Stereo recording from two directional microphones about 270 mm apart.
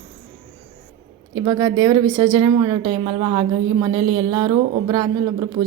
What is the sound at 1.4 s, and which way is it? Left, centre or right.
Speech, centre.